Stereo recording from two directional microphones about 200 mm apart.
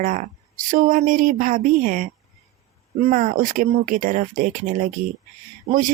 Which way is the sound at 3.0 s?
40° right (ahead or behind).